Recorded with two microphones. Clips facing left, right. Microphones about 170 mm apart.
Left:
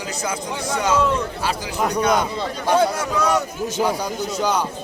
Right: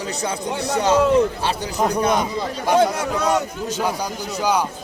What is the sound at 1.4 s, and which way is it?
Speech, 30° right (ahead or behind).